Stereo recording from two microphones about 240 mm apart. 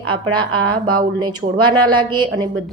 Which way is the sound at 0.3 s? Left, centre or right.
Right.